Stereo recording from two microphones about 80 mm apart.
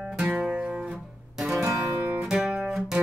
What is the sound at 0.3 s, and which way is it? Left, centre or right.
Music, centre.